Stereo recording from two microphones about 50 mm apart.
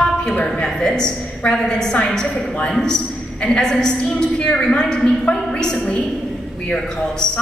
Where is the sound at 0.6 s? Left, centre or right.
Centre.